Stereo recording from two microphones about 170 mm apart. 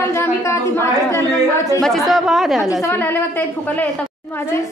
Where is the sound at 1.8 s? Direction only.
Centre (ahead or behind).